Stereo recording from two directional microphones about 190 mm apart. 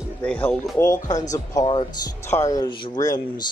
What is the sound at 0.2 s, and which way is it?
Speech, 10° left (ahead or behind).